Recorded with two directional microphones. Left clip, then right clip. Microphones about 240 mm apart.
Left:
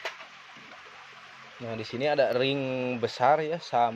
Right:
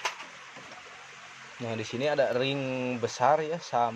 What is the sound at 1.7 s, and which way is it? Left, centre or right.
Speech, centre.